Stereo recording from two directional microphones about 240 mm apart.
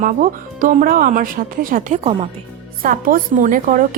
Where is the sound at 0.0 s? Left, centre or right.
Right.